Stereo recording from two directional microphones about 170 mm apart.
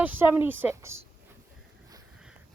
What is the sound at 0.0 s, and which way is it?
Speech, 10° right (ahead or behind).